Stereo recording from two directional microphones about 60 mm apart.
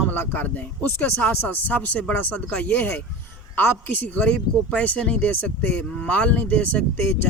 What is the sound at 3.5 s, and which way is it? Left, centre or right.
A man's voice, left.